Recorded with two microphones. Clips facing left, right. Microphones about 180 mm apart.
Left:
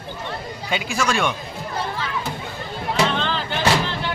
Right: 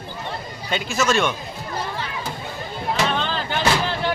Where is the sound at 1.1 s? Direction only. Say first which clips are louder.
Right 2 dB; 10° left (ahead or behind).